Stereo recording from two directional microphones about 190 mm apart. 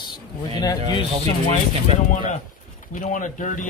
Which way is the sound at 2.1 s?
40° left (ahead or behind).